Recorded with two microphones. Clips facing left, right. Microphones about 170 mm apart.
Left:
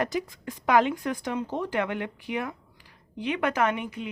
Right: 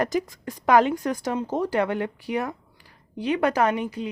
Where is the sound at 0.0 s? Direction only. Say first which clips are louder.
Right 4 dB; 45° right (ahead or behind).